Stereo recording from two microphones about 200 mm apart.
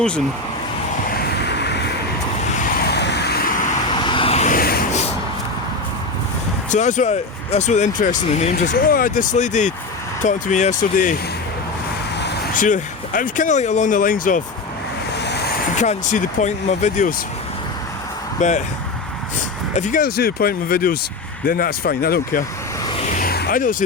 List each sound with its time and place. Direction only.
1.4 s vehicle: 60° left (ahead or behind)
3.8 s vehicle: 25° left (ahead or behind); by 4.9 s 45° left (ahead or behind)
6.7 s speech: 40° left (ahead or behind)
12.5 s speech: 40° left (ahead or behind)
15.2 s vehicle: 55° left (ahead or behind)
15.8 s speech: 35° left (ahead or behind)
18.3 s speech: 35° left (ahead or behind)
19.7 s speech: 40° left (ahead or behind)
22.8 s vehicle: 25° left (ahead or behind)
23.0 s vehicle: 45° left (ahead or behind)